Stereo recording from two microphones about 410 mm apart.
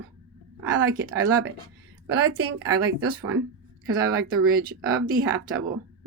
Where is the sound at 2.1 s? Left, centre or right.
Right.